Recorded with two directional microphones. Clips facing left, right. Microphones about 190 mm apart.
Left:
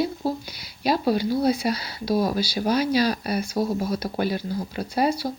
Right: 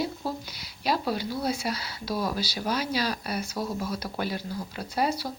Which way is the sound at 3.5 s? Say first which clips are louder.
Left 8 dB; 35° left (ahead or behind).